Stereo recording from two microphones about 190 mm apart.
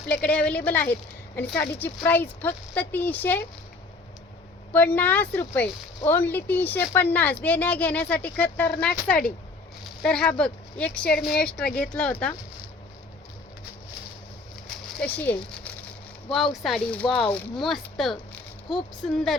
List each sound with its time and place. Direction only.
0.1 s speech: 5° left (ahead or behind)
4.7 s speech: 10° left (ahead or behind)
11.1 s speech: 55° left (ahead or behind)
11.3 s speech: 5° left (ahead or behind)
14.7 s a sound: 5° left (ahead or behind)
16.3 s speech: centre (ahead or behind)